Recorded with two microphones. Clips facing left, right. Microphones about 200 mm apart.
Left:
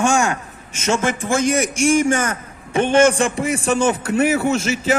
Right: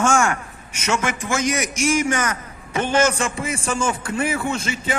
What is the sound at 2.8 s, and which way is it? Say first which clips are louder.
A man's voice: left 5 dB; 55° left (ahead or behind).